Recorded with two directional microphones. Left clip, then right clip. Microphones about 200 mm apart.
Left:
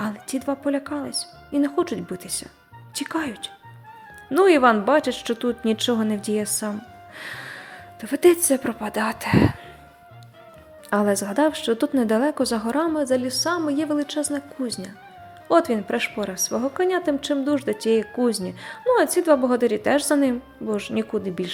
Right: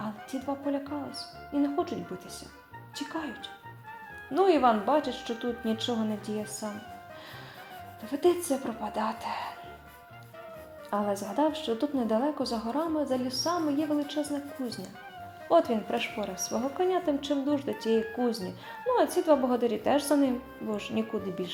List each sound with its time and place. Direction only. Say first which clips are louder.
0.0 s a woman's voice: left 8 dB; 30° left (ahead or behind)
7.2 s music: left 11 dB; 30° left (ahead or behind)
8.0 s speech: left 9 dB; 30° left (ahead or behind)
10.8 s a woman's voice: left 9 dB; 30° left (ahead or behind)